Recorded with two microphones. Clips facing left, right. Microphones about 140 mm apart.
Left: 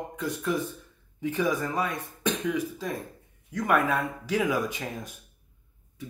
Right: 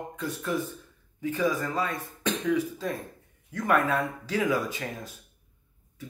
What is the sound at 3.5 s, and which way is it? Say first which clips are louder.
Speech: even; 15° left (ahead or behind).